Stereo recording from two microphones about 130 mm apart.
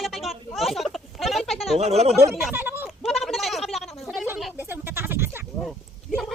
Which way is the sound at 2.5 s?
15° right (ahead or behind).